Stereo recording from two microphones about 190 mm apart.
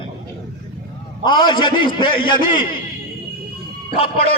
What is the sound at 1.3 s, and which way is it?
A man's voice, 25° left (ahead or behind).